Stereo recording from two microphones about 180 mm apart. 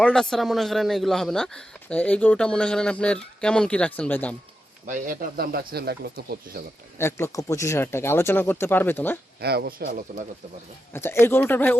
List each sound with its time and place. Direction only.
0.0 s a man's voice: 5° left (ahead or behind)
4.9 s speech: 55° right (ahead or behind)
7.0 s speech: 15° left (ahead or behind)
9.4 s speech: 60° right (ahead or behind)
10.9 s speech: 15° left (ahead or behind)